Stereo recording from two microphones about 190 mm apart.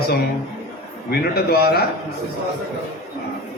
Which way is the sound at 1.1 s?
55° left (ahead or behind).